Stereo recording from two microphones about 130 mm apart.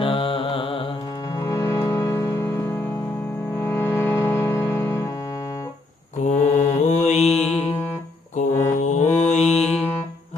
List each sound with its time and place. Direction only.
0.0 s mantra: 40° left (ahead or behind)
1.5 s music: 25° left (ahead or behind)
3.7 s music: 20° left (ahead or behind)
6.2 s mantra: 70° left (ahead or behind)